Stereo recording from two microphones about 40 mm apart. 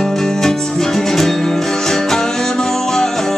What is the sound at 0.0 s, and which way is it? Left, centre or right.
Music, centre.